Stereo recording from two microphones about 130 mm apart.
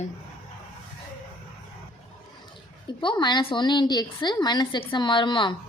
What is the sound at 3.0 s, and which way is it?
Speech, 35° left (ahead or behind).